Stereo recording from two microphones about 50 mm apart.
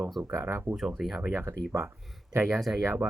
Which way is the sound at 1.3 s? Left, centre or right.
Right.